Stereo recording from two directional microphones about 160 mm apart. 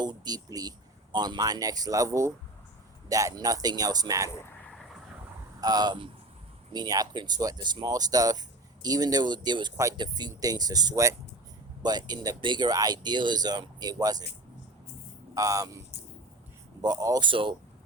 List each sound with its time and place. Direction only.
0.0 s speech: 25° right (ahead or behind)
5.5 s speech: 25° right (ahead or behind)
15.4 s speech: 20° right (ahead or behind)
16.8 s speech: 25° right (ahead or behind)